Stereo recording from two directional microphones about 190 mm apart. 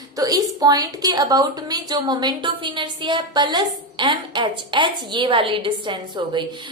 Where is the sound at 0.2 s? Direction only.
20° right (ahead or behind).